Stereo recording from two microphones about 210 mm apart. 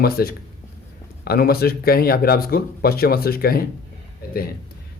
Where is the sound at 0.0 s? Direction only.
45° left (ahead or behind).